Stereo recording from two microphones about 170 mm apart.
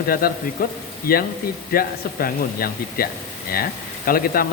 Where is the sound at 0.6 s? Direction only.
55° left (ahead or behind).